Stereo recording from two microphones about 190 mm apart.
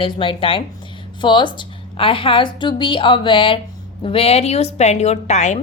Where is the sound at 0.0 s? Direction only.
25° left (ahead or behind).